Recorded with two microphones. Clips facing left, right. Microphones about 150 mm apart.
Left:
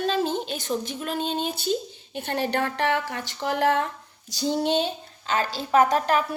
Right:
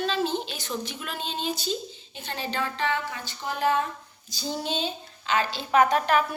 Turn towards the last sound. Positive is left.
turn(degrees=35)  # may be behind; listen again after turning